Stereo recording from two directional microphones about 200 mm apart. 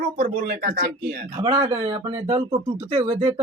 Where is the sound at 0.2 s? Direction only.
40° right (ahead or behind).